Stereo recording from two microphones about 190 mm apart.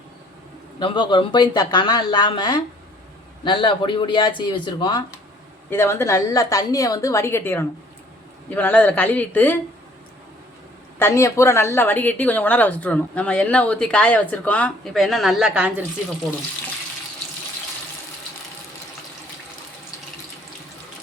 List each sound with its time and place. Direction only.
0.8 s speech: 25° left (ahead or behind)
5.7 s speech: 15° left (ahead or behind)
11.0 s speech: 15° left (ahead or behind); by 15.7 s 5° right (ahead or behind)